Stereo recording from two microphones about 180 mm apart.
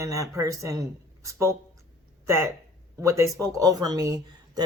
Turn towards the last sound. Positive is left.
turn(degrees=-20)  # may be behind; listen again after turning